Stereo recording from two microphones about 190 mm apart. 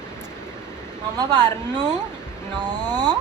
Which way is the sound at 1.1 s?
20° right (ahead or behind).